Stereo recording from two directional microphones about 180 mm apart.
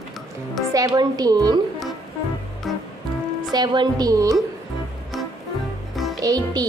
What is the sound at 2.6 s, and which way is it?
Music, centre (ahead or behind).